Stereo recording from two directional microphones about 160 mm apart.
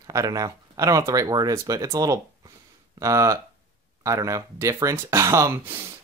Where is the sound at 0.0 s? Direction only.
20° right (ahead or behind).